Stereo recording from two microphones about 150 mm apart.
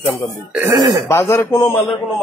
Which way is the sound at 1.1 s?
15° left (ahead or behind).